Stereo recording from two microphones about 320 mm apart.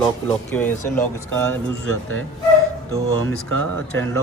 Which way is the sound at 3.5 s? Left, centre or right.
Right.